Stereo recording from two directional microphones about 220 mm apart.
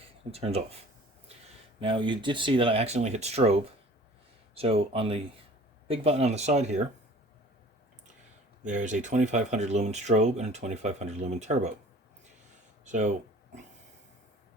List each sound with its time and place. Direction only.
0.3 s speech: 30° right (ahead or behind)
1.8 s speech: 20° right (ahead or behind)
8.6 s speech: 35° right (ahead or behind)
12.8 s speech: 35° right (ahead or behind)